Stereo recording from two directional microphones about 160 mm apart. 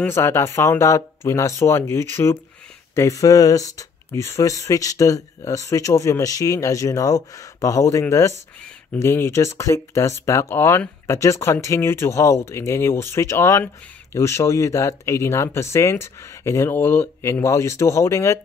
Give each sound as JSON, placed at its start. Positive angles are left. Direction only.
{"t": 0.0, "sound": "speech", "side_deg": 15}